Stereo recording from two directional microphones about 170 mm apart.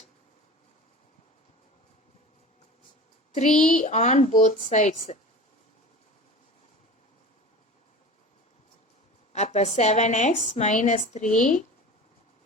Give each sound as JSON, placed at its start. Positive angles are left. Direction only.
{"t": 3.3, "sound": "a woman's voice", "side_deg": 45}
{"t": 9.3, "sound": "a woman's voice", "side_deg": 40}